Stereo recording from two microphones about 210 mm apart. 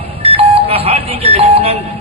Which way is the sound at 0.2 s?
30° right (ahead or behind).